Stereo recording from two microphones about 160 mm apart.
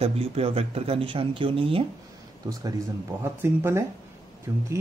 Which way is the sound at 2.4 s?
20° right (ahead or behind).